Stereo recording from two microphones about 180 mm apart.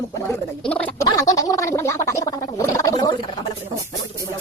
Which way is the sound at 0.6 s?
5° left (ahead or behind).